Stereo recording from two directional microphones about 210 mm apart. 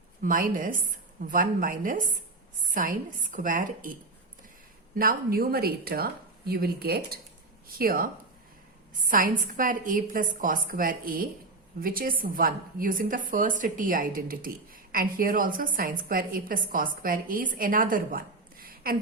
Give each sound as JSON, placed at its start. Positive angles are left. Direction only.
{"t": 0.2, "sound": "a woman's voice", "side_deg": -40}
{"t": 4.9, "sound": "a woman's voice", "side_deg": -45}